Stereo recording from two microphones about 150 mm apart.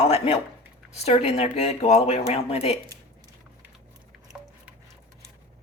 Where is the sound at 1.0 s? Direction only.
45° left (ahead or behind).